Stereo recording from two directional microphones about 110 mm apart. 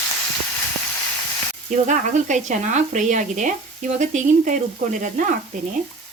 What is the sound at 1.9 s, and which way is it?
Speech, 90° right.